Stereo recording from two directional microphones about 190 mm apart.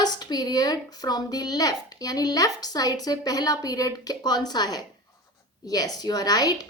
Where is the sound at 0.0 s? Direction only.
20° left (ahead or behind).